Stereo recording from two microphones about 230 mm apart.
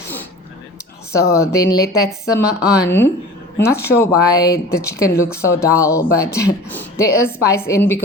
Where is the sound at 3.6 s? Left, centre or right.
Centre.